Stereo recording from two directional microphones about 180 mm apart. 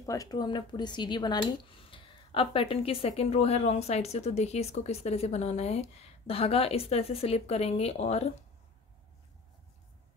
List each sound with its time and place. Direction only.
0.0 s speech: 20° left (ahead or behind); by 8.3 s 35° left (ahead or behind)